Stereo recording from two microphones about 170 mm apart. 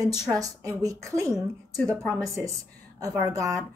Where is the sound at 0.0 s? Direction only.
20° right (ahead or behind).